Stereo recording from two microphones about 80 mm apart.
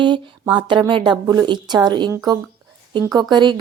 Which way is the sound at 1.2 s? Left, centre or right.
Right.